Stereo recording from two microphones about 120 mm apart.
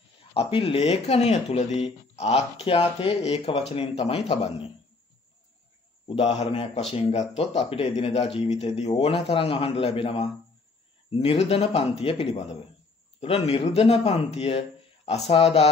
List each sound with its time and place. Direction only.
0.3 s speech: 55° left (ahead or behind)
6.0 s speech: 50° left (ahead or behind)